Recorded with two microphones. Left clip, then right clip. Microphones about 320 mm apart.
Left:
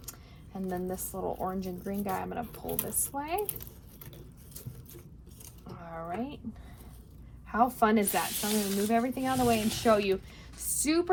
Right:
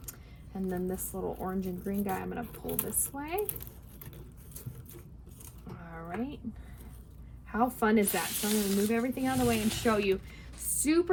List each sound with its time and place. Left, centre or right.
0.7 s a woman's voice: centre
5.8 s speech: centre
7.4 s a woman's voice: centre
8.4 s a woman's voice: centre